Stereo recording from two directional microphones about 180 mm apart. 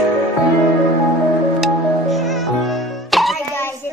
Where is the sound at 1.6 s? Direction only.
Centre (ahead or behind).